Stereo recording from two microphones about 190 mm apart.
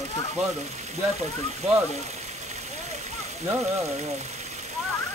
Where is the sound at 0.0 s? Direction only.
35° right (ahead or behind).